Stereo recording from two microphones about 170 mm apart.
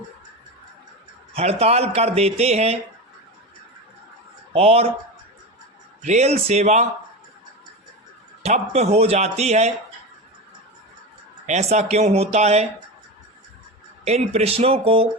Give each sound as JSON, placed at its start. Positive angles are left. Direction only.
{"t": 1.3, "sound": "speech", "side_deg": -35}
{"t": 4.5, "sound": "speech", "side_deg": -35}
{"t": 6.0, "sound": "speech", "side_deg": -40}
{"t": 8.4, "sound": "speech", "side_deg": -40}
{"t": 11.4, "sound": "speech", "side_deg": -40}
{"t": 14.0, "sound": "speech", "side_deg": -40}